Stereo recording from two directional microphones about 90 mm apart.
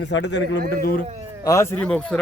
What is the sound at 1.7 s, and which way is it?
Speech, 15° left (ahead or behind).